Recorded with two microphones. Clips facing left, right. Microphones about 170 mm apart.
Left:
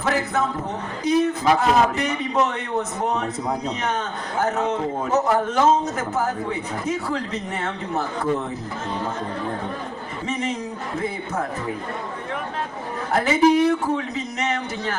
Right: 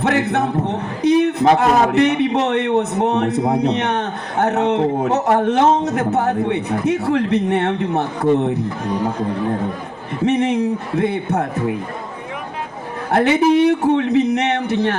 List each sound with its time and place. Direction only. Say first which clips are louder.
0.0 s a man's voice: right 5 dB; 65° right (ahead or behind)
8.9 s speech: right 6 dB; 15° right (ahead or behind)
10.2 s speech: right 11 dB; 65° right (ahead or behind)
13.1 s speech: right 3 dB; 65° right (ahead or behind)